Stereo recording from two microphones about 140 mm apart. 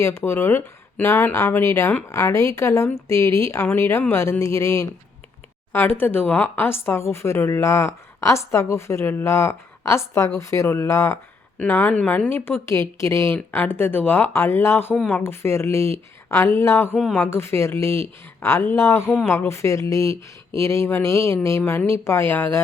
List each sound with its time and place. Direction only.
0.0 s speech: 20° left (ahead or behind)